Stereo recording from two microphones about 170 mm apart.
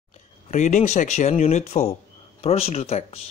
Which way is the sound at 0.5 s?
45° left (ahead or behind).